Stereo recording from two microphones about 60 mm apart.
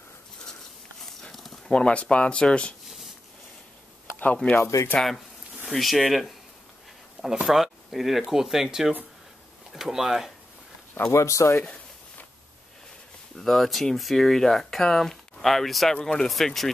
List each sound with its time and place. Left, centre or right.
1.3 s a sound: centre
1.7 s speech: centre
4.6 s speech: left
4.9 s speech: centre
7.4 s speech: centre
11.1 s speech: left
13.4 s speech: centre